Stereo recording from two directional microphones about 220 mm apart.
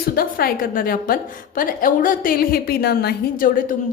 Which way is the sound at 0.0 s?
40° left (ahead or behind).